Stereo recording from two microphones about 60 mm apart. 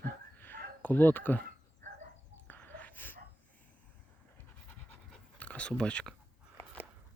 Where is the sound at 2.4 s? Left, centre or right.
Left.